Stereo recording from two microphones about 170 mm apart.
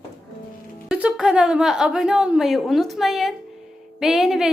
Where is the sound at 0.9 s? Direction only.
5° right (ahead or behind).